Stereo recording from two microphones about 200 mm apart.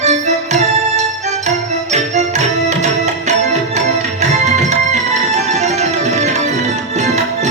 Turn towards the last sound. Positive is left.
turn(degrees=-35)  # may be behind; listen again after turning